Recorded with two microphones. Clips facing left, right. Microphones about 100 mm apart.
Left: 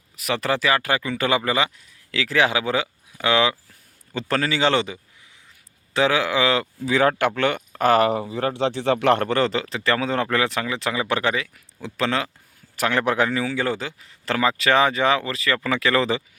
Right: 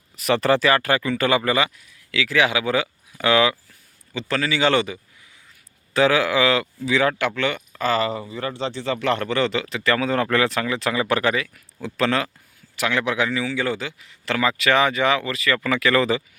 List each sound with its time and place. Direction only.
0.2 s speech: 5° left (ahead or behind); by 1.7 s 20° left (ahead or behind)
2.1 s speech: 35° left (ahead or behind)
4.1 s speech: 45° left (ahead or behind); by 6.7 s 30° left (ahead or behind)
6.8 s speech: 45° left (ahead or behind); by 12.3 s 20° left (ahead or behind)
12.7 s speech: 40° left (ahead or behind)